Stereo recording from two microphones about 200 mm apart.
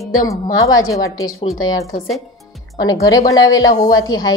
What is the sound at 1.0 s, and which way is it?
Speech, 15° left (ahead or behind).